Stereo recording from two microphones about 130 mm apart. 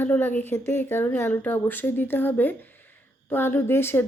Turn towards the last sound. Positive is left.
turn(degrees=15)  # may be behind; listen again after turning